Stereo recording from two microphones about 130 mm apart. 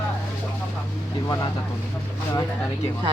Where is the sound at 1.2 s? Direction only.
30° left (ahead or behind).